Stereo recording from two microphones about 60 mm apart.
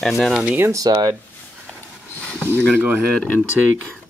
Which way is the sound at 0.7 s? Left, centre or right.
Right.